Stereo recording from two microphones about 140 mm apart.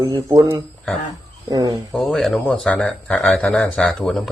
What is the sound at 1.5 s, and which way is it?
Speech, 25° right (ahead or behind).